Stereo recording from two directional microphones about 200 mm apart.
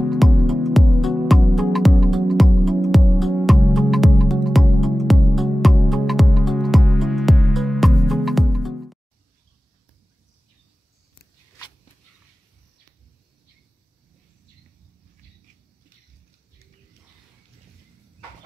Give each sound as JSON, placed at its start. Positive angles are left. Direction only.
{"t": 0.0, "sound": "music", "side_deg": 0}